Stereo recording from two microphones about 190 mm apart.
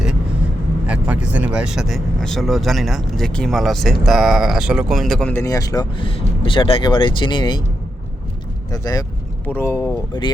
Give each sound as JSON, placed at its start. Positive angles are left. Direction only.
{"t": 0.9, "sound": "speech", "side_deg": -5}
{"t": 8.7, "sound": "speech", "side_deg": 20}